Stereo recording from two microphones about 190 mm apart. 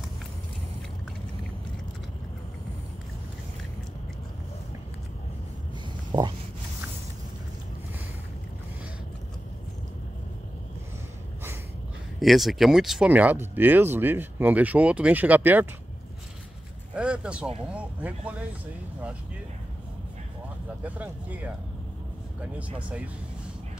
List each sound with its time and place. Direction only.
6.1 s speech: 25° right (ahead or behind)
12.2 s speech: centre (ahead or behind)
16.9 s speech: 5° right (ahead or behind)
20.8 s speech: 10° right (ahead or behind)
22.8 s speech: 5° right (ahead or behind)